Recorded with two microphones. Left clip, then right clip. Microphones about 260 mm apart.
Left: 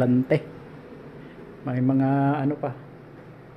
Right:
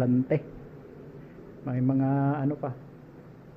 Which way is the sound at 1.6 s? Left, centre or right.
Left.